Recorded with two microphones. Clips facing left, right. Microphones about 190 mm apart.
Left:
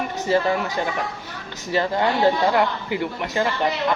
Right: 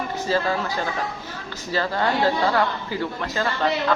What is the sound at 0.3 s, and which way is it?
Speech, 20° left (ahead or behind).